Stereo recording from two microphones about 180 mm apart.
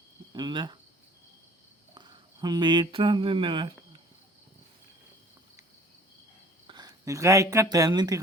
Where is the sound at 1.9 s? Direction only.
25° right (ahead or behind).